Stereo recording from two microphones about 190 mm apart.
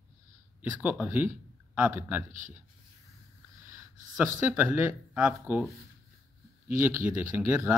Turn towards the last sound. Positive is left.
turn(degrees=-10)  # may be behind; listen again after turning